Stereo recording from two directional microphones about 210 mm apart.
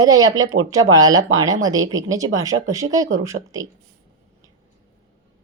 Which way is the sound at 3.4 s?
50° right (ahead or behind).